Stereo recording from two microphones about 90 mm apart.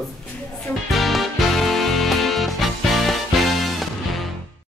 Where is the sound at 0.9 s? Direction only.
Centre (ahead or behind).